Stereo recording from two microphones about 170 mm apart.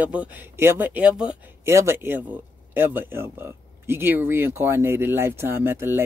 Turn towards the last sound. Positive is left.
turn(degrees=-15)  # may be behind; listen again after turning